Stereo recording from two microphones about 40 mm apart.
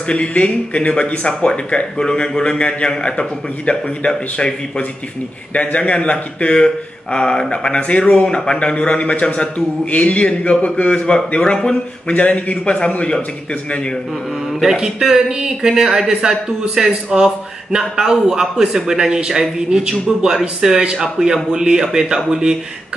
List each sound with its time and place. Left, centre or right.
0.0 s a man's voice: left
5.5 s a man's voice: left
12.2 s a man's voice: left
14.5 s a man's voice: centre